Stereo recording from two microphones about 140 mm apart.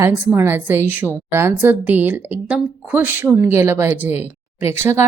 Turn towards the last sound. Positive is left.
turn(degrees=-20)  # may be behind; listen again after turning